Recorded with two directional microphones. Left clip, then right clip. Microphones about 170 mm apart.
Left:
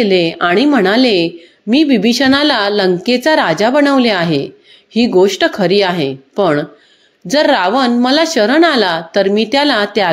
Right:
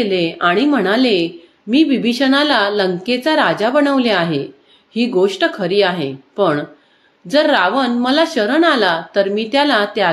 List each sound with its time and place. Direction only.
0.0 s a woman's voice: 45° left (ahead or behind)